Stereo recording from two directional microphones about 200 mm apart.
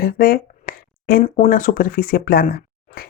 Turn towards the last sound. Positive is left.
turn(degrees=45)  # may be behind; listen again after turning